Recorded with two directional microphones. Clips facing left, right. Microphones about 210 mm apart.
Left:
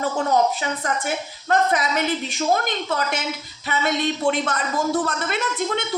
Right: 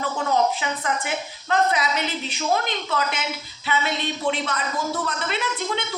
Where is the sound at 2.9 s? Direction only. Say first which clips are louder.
Even; 45° left (ahead or behind).